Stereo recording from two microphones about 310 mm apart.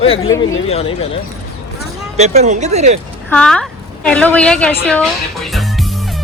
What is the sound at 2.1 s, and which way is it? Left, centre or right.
Speech, right.